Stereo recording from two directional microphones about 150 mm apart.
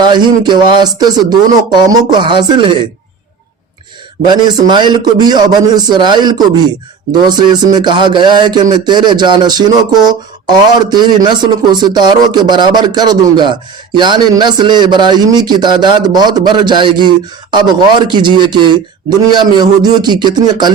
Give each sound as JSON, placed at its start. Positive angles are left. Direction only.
{"t": 0.0, "sound": "speech", "side_deg": -30}
{"t": 4.3, "sound": "speech", "side_deg": -30}